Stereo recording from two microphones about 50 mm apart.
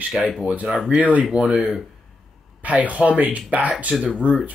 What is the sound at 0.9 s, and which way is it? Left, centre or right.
Speech, right.